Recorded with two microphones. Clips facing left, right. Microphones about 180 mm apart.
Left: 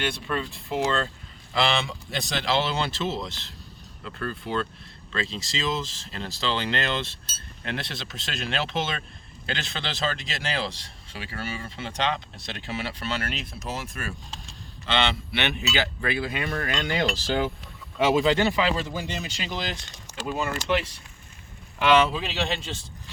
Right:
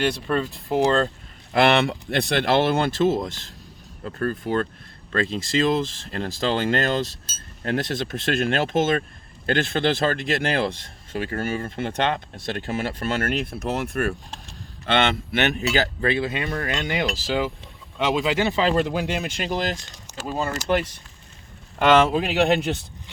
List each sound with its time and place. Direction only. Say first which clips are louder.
0.0 s speech: right 6 dB; 40° right (ahead or behind)
1.5 s speech: right 7 dB; 60° right (ahead or behind); by 17.1 s 20° right (ahead or behind)
17.2 s speech: right 1 dB; 5° right (ahead or behind)
18.8 s speech: right 8 dB; 80° right; by 20.6 s 35° right (ahead or behind)
21.8 s speech: right 4 dB; 50° right (ahead or behind)